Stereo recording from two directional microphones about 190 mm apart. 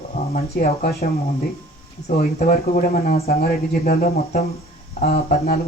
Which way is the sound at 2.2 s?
50° left (ahead or behind).